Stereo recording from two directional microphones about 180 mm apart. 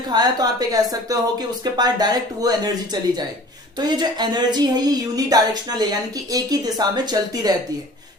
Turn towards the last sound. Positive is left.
turn(degrees=-20)  # may be behind; listen again after turning